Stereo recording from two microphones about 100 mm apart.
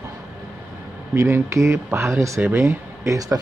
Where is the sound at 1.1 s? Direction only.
30° right (ahead or behind).